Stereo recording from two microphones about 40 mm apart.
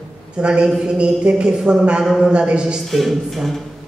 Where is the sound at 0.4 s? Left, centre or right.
Right.